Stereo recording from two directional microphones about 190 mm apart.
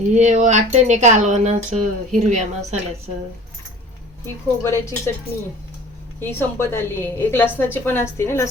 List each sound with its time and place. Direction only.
0.1 s speech: 40° right (ahead or behind)
4.6 s a woman's voice: 15° left (ahead or behind)
6.1 s a woman's voice: 10° left (ahead or behind)